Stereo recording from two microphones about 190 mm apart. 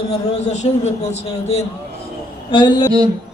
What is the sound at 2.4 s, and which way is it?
Speech, 25° left (ahead or behind).